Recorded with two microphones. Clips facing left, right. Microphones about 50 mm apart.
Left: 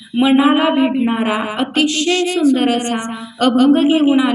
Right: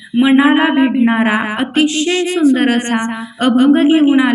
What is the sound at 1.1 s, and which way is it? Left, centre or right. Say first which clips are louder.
Speech: right 3 dB; right.